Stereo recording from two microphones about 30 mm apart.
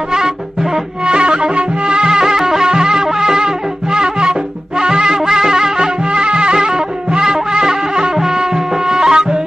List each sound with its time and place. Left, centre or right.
0.1 s music: centre; by 2.0 s right
2.0 s music: centre
6.0 s music: right